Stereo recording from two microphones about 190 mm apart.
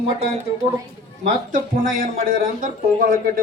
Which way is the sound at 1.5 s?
50° right (ahead or behind).